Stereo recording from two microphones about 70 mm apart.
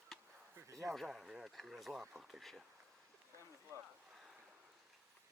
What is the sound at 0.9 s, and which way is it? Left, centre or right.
Speech, centre.